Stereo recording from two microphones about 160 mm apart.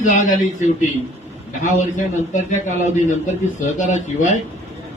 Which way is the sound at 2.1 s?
50° left (ahead or behind).